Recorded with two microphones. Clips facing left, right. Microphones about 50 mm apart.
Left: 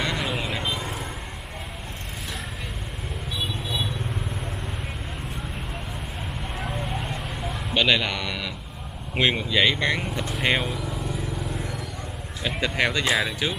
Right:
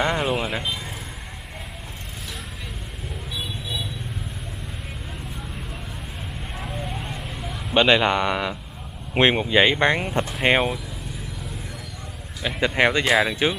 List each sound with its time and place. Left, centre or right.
0.0 s vehicle: right
0.4 s vehicle: centre
6.6 s vehicle: centre
7.7 s speech: right
10.4 s speech: right
12.4 s speech: centre
13.1 s speech: centre